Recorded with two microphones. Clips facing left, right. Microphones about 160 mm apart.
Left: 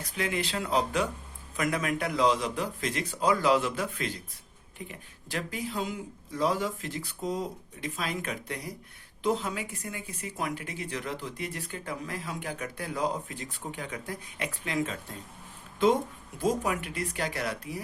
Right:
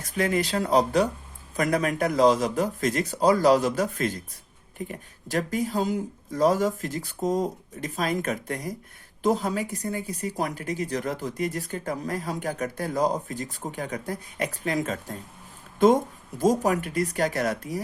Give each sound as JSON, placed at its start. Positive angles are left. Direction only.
{"t": 0.0, "sound": "speech", "side_deg": -40}
{"t": 16.4, "sound": "speech", "side_deg": -40}